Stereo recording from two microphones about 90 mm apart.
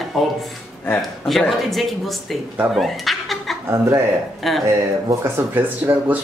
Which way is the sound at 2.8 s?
Centre (ahead or behind).